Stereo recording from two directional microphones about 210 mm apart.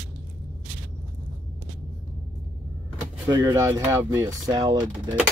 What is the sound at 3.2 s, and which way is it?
Speech, 15° right (ahead or behind).